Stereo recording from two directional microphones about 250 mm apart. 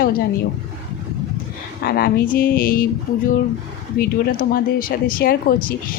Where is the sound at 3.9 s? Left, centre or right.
Left.